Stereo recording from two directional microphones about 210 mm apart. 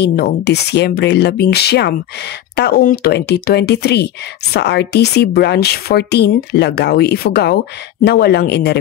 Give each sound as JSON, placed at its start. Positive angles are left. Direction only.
{"t": 0.0, "sound": "speech", "side_deg": 50}